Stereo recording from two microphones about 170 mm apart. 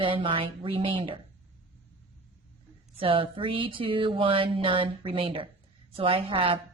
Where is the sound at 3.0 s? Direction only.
30° right (ahead or behind).